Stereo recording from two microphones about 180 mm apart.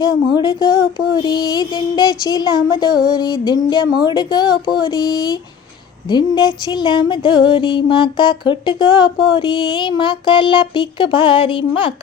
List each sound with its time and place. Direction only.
0.0 s music: 25° left (ahead or behind)